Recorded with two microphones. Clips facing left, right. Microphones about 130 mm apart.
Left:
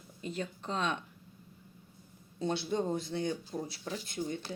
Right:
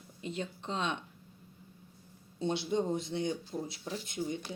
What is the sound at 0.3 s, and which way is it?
Speech, 25° right (ahead or behind).